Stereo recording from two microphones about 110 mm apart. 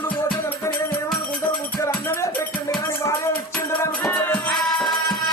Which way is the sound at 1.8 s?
25° left (ahead or behind).